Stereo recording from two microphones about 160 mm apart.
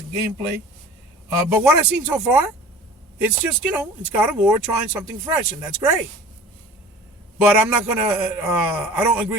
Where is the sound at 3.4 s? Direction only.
10° right (ahead or behind).